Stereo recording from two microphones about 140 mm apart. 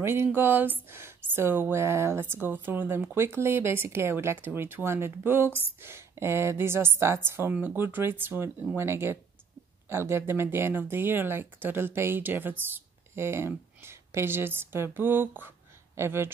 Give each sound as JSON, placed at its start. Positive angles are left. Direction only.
{"t": 0.0, "sound": "speech", "side_deg": -15}